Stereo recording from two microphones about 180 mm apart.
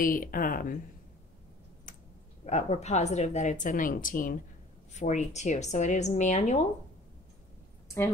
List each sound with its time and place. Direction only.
0.0 s speech: 50° left (ahead or behind)
2.4 s a woman's voice: 40° left (ahead or behind)